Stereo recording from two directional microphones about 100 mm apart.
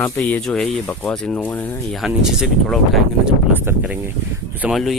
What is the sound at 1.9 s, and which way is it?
Speech, 5° right (ahead or behind).